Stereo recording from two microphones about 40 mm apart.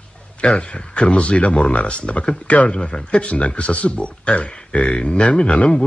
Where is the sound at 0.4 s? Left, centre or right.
Left.